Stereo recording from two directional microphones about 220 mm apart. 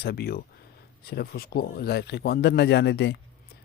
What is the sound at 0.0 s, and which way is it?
Speech, 45° left (ahead or behind).